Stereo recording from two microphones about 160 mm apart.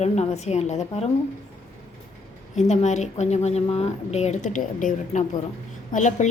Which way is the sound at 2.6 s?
45° left (ahead or behind).